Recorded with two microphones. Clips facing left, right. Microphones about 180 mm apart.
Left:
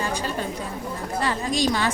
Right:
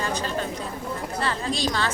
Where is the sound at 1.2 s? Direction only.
15° left (ahead or behind).